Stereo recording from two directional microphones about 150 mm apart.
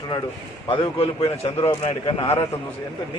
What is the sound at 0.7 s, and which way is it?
A man's voice, 35° left (ahead or behind).